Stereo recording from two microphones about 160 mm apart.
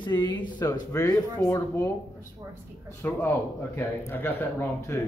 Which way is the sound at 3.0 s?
15° left (ahead or behind).